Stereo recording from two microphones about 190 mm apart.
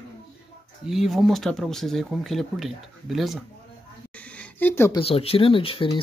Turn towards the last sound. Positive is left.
turn(degrees=30)  # may be behind; listen again after turning